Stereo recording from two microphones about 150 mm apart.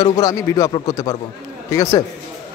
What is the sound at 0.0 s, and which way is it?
Speech, 25° left (ahead or behind).